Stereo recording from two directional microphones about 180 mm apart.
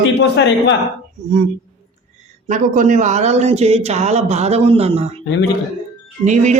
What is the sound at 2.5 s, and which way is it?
Speech, 45° right (ahead or behind).